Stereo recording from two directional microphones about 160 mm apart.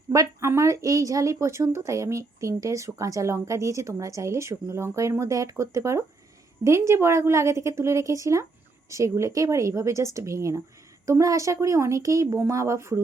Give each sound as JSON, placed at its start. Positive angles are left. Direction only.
{"t": 0.1, "sound": "a woman's voice", "side_deg": -20}